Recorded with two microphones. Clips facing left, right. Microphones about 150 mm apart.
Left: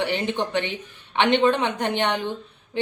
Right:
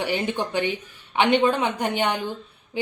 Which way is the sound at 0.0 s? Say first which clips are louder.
Left 1 dB; 10° right (ahead or behind).